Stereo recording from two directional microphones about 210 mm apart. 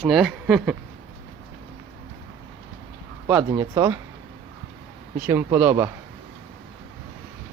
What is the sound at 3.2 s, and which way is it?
Speech, 15° right (ahead or behind).